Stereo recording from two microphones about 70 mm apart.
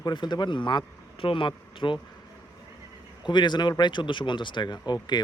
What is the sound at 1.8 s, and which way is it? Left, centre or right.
Speech, left.